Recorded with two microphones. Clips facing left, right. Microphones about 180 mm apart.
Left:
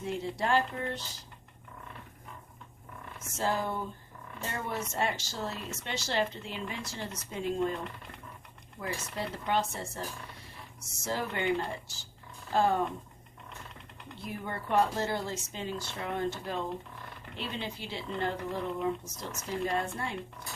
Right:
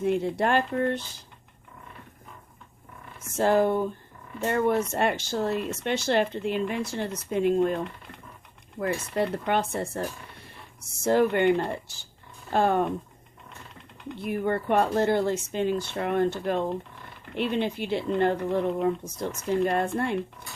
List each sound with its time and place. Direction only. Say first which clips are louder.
0.0 s speech: right 8 dB; 60° right (ahead or behind)
3.3 s speech: right 10 dB; 60° right (ahead or behind)
8.8 s speech: right 10 dB; 60° right (ahead or behind)
14.2 s speech: right 11 dB; 60° right (ahead or behind)